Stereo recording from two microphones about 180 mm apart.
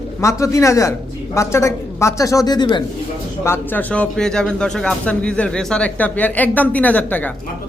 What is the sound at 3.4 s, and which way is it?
A man's voice, 10° left (ahead or behind).